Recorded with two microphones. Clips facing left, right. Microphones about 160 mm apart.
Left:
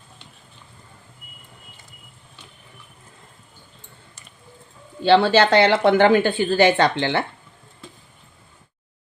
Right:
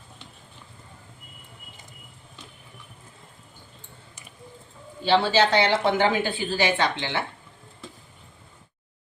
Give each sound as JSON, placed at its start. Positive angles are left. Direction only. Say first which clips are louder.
{"t": 5.0, "sound": "a woman's voice", "louder": "left 5 dB", "side_deg": 65}